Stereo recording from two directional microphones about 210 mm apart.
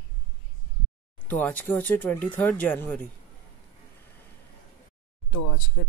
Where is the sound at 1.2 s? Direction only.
10° left (ahead or behind).